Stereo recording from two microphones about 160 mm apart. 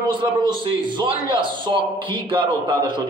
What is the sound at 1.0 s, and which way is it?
A man's voice, 30° right (ahead or behind).